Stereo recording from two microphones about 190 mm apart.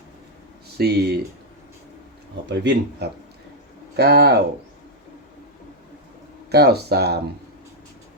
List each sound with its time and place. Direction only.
0.8 s speech: 55° right (ahead or behind)
2.5 s speech: 65° right (ahead or behind)
6.5 s speech: 55° right (ahead or behind)